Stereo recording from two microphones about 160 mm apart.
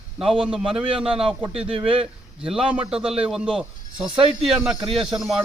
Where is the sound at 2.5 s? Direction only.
5° right (ahead or behind).